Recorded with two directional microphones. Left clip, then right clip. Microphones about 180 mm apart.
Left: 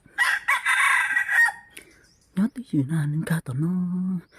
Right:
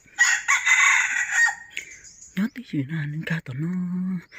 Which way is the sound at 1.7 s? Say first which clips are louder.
Right 11 dB; 25° left (ahead or behind).